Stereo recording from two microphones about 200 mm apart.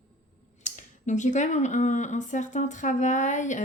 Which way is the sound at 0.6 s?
35° left (ahead or behind).